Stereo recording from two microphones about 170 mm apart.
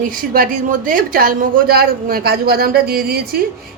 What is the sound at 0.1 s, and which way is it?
Speech, 55° right (ahead or behind).